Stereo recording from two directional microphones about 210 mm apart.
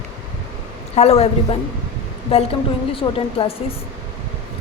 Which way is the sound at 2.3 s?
30° left (ahead or behind).